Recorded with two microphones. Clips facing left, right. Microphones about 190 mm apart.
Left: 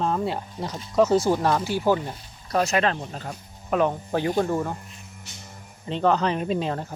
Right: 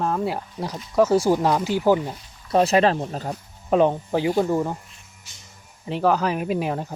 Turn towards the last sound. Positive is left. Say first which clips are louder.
# right 1 dB
turn(degrees=-10)  # may be behind; listen again after turning